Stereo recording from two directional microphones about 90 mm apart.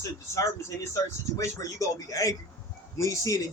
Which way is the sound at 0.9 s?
35° left (ahead or behind).